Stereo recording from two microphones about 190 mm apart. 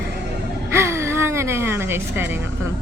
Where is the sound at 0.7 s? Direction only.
15° right (ahead or behind).